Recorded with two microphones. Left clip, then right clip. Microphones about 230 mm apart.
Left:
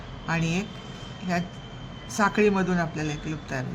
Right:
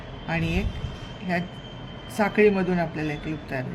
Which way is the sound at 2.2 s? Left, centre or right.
Left.